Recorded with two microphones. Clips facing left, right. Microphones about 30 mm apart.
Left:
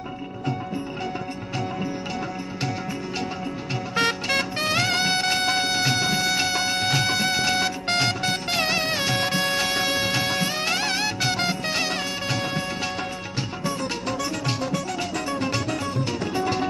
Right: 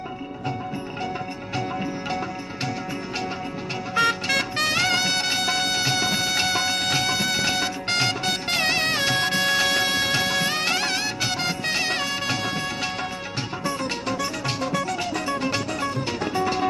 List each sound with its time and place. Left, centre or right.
3.9 s music: left
4.6 s music: centre
6.3 s music: centre
9.1 s music: right
9.9 s music: centre
10.7 s music: centre
13.7 s music: centre